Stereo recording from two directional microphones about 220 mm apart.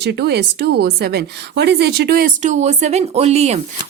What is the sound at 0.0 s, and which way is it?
Speech, 50° right (ahead or behind).